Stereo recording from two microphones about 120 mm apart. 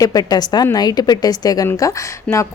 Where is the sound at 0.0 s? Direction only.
30° left (ahead or behind).